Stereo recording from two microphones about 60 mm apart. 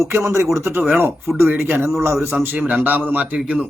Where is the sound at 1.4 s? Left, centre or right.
Right.